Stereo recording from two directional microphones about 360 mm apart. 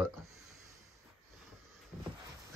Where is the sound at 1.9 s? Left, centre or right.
Centre.